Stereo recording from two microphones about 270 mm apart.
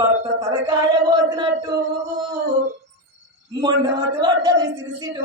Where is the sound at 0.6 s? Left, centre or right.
Centre.